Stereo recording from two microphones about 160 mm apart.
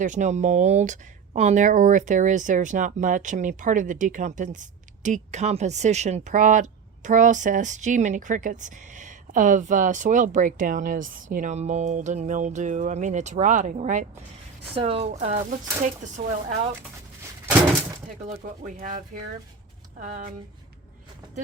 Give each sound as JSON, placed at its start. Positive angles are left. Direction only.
{"t": 0.0, "sound": "speech", "side_deg": -50}
{"t": 14.8, "sound": "speech", "side_deg": -40}
{"t": 18.3, "sound": "speech", "side_deg": -50}